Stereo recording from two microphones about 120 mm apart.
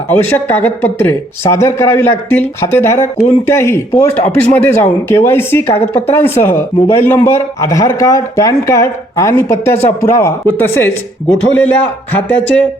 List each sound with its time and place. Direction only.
0.1 s speech: 15° left (ahead or behind)